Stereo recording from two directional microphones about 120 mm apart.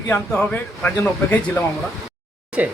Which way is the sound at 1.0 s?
20° left (ahead or behind).